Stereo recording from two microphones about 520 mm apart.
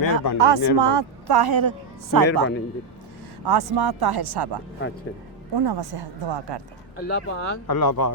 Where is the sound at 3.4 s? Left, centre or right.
Right.